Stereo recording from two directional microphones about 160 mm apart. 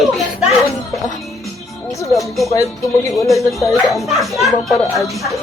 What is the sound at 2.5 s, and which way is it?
Speech, 20° left (ahead or behind).